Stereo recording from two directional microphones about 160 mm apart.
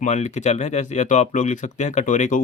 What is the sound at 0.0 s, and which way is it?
Speech, 45° left (ahead or behind).